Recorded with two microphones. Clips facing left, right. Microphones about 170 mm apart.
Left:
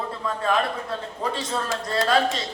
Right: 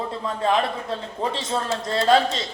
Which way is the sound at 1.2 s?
25° right (ahead or behind).